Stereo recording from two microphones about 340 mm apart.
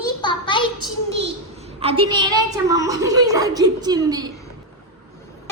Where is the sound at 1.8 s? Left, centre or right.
Centre.